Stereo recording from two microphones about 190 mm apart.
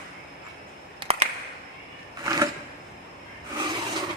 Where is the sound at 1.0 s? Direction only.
30° right (ahead or behind).